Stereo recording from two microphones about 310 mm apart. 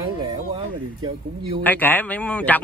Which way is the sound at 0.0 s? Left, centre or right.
Centre.